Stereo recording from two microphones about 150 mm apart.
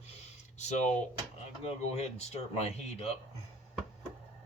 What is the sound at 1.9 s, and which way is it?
Speech, 45° left (ahead or behind).